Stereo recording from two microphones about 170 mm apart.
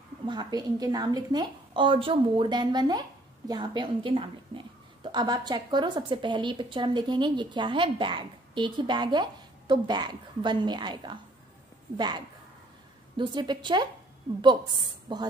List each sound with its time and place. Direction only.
0.3 s a woman's voice: 25° right (ahead or behind)
13.2 s a woman's voice: 25° right (ahead or behind)